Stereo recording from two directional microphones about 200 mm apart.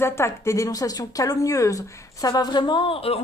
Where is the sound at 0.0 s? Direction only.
15° left (ahead or behind).